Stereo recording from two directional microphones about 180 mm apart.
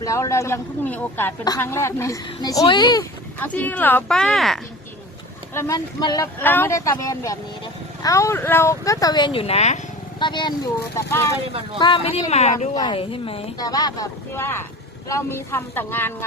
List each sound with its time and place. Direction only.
0.0 s speech: 15° left (ahead or behind)
3.4 s speech: 10° left (ahead or behind)
5.5 s speech: 20° left (ahead or behind)
6.4 s speech: 10° left (ahead or behind); by 9.8 s 40° left (ahead or behind)
10.2 s speech: 25° left (ahead or behind)
10.9 s speech: 15° left (ahead or behind)
11.8 s speech: 30° left (ahead or behind)
12.7 s speech: 25° left (ahead or behind)
13.6 s speech: 20° left (ahead or behind)